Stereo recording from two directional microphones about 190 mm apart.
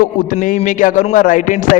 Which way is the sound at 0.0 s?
45° left (ahead or behind).